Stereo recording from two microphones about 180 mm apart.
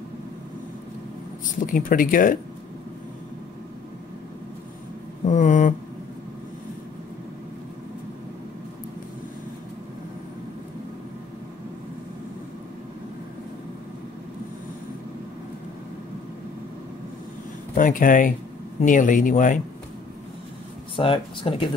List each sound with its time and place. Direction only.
1.4 s speech: 45° left (ahead or behind)
5.3 s a sound: 40° left (ahead or behind)
17.7 s speech: 50° left (ahead or behind)
20.9 s speech: 30° left (ahead or behind)